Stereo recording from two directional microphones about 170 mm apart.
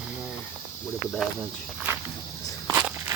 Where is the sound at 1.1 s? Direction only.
Centre (ahead or behind).